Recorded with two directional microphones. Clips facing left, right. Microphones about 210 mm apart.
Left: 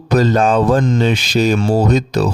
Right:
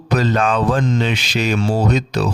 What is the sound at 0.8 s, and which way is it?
Speech, 50° left (ahead or behind).